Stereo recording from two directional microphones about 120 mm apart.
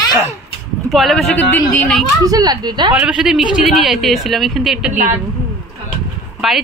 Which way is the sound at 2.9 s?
5° right (ahead or behind).